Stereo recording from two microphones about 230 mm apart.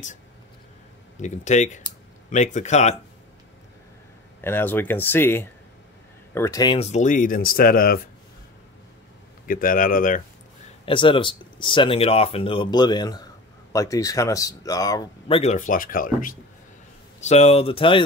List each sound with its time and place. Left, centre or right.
1.1 s speech: left
4.4 s speech: centre; by 8.1 s left
9.5 s speech: left
10.9 s speech: left